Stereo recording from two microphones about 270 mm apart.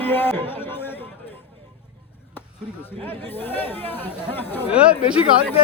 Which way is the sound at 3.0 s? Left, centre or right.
Centre.